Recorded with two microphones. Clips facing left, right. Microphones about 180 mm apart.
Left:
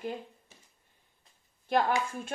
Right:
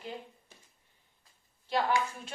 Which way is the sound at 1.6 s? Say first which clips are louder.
Left 2 dB; 55° left (ahead or behind).